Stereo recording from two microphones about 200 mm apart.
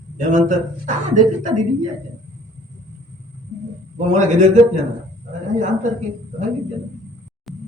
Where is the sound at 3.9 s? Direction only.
40° right (ahead or behind).